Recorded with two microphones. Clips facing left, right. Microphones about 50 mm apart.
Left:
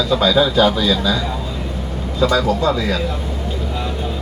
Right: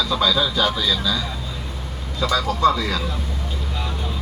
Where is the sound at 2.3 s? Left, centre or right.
Centre.